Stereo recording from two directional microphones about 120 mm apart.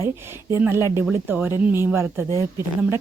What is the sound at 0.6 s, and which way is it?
A woman's voice, 20° right (ahead or behind).